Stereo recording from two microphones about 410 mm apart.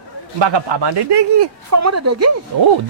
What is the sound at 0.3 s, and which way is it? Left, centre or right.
Speech, right.